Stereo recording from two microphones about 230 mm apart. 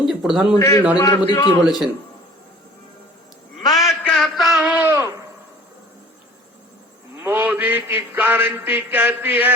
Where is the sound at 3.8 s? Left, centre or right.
Centre.